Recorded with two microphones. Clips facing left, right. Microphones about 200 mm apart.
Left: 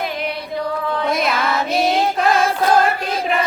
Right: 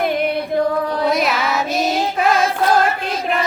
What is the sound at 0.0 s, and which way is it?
Music, 55° right (ahead or behind).